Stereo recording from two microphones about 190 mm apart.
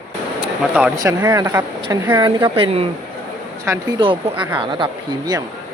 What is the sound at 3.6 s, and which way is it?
Speech, 15° right (ahead or behind).